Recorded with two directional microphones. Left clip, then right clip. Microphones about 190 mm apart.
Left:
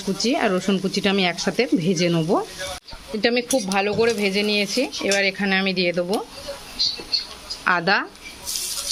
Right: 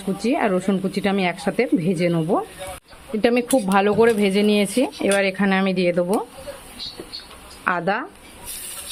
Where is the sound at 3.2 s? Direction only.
20° right (ahead or behind).